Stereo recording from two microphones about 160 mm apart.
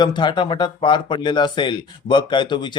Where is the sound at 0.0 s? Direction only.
30° left (ahead or behind).